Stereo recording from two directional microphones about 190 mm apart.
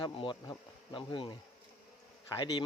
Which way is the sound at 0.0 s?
25° left (ahead or behind).